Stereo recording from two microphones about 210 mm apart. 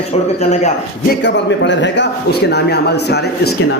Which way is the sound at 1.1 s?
55° left (ahead or behind).